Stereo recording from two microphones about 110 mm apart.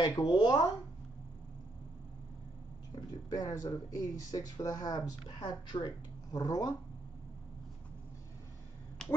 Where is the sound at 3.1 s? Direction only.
35° left (ahead or behind).